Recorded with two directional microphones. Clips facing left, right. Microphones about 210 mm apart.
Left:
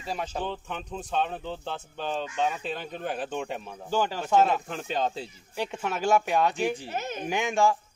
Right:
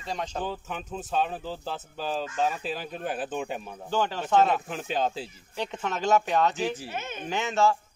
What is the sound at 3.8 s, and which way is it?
Speech, 10° left (ahead or behind).